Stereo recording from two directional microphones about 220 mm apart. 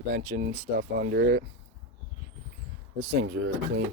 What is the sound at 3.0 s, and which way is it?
Speech, 60° right (ahead or behind).